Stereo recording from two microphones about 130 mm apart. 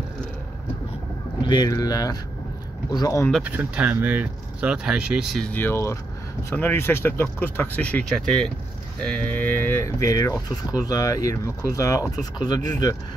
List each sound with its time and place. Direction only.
1.4 s speech: 35° left (ahead or behind)
3.4 s speech: 10° right (ahead or behind)
5.4 s speech: 15° left (ahead or behind); by 12.7 s 35° left (ahead or behind)